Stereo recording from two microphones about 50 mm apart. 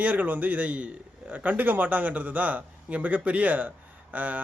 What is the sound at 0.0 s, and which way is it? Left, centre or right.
A man's voice, right.